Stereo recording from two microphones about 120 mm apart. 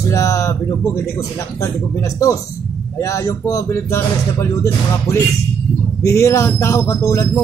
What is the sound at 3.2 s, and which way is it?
Speech, 25° left (ahead or behind).